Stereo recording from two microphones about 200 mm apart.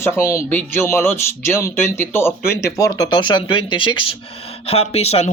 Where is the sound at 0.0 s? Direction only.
15° left (ahead or behind).